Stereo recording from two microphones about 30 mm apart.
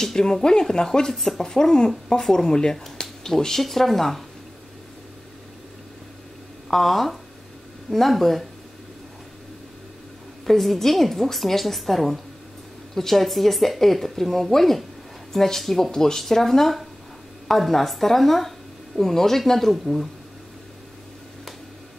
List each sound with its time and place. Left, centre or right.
0.0 s speech: centre
6.7 s a woman's voice: centre
10.4 s a woman's voice: centre